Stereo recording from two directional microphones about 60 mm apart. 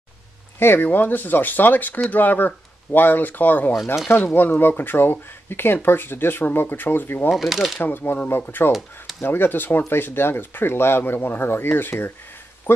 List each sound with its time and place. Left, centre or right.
0.6 s speech: left
0.8 s speech: left
7.2 s speech: centre
7.8 s speech: left
12.7 s a sound: left